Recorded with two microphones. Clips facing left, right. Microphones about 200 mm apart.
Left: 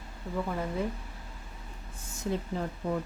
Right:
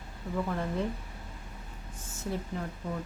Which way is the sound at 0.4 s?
5° left (ahead or behind).